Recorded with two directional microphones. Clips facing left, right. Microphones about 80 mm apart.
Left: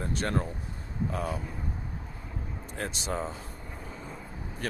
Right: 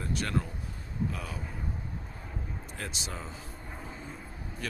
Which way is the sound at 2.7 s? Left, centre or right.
Left.